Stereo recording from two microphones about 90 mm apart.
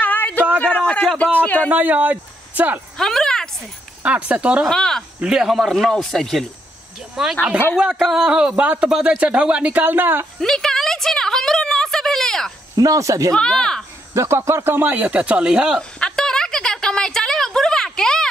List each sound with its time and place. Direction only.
0.0 s a sound: 20° left (ahead or behind)
0.6 s a man's voice: 15° left (ahead or behind)
1.7 s speech: 20° right (ahead or behind)
3.0 s speech: 5° left (ahead or behind)
4.3 s a man's voice: 15° right (ahead or behind)
4.6 s speech: 5° left (ahead or behind)
5.2 s a man's voice: 5° right (ahead or behind); by 10.2 s 25° right (ahead or behind)
10.4 s a sound: 5° left (ahead or behind)
12.7 s speech: 40° right (ahead or behind)
13.3 s speech: 5° left (ahead or behind)
14.1 s speech: 30° right (ahead or behind); by 15.8 s 10° right (ahead or behind)
16.0 s a sound: 5° left (ahead or behind)